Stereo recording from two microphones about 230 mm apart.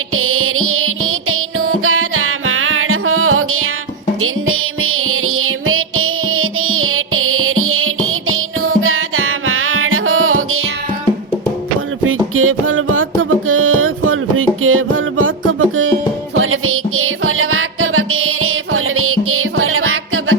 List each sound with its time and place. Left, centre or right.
0.1 s music: right
12.0 s music: right